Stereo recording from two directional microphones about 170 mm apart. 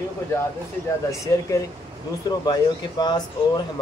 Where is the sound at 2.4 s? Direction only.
25° left (ahead or behind).